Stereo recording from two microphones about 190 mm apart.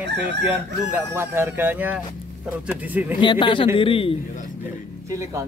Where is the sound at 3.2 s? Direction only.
25° left (ahead or behind).